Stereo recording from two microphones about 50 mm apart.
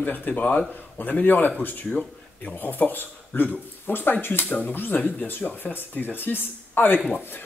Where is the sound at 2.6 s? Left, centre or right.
Left.